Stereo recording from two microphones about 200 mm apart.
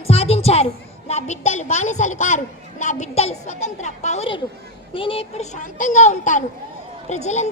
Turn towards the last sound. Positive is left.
turn(degrees=35)  # may be behind; listen again after turning